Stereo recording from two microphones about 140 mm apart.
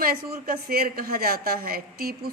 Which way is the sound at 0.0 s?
90° right.